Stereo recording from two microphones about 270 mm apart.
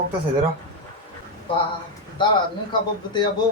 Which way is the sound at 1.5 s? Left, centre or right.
Centre.